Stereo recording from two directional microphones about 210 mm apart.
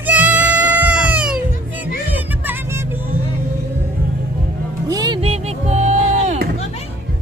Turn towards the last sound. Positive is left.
turn(degrees=-35)  # may be behind; listen again after turning